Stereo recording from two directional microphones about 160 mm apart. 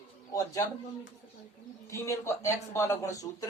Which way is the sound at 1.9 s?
20° left (ahead or behind).